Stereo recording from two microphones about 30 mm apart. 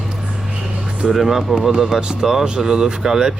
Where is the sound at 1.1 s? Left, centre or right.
Centre.